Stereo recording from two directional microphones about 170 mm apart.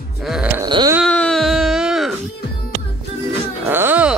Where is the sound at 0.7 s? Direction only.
25° right (ahead or behind).